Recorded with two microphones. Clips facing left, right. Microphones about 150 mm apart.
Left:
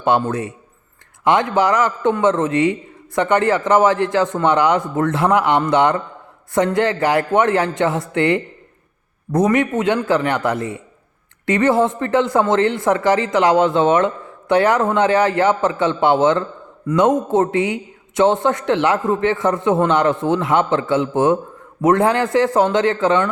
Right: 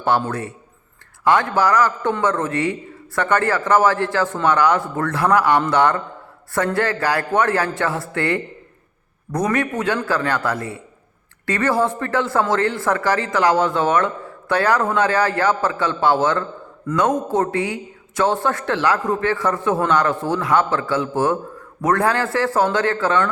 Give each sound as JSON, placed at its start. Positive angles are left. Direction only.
{"t": 0.0, "sound": "a man's voice", "side_deg": 20}